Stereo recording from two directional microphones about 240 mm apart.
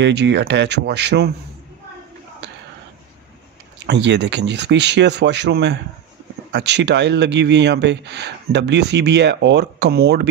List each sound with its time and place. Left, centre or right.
0.0 s speech: right
3.8 s speech: right